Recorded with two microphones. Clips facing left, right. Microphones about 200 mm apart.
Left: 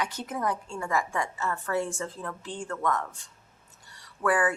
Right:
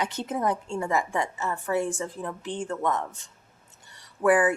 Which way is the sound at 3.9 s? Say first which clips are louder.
Right 5 dB; 20° right (ahead or behind).